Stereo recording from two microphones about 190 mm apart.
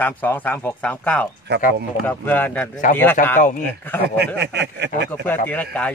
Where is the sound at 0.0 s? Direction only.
10° left (ahead or behind).